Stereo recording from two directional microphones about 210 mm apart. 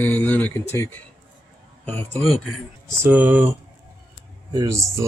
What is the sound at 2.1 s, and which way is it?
Speech, centre (ahead or behind).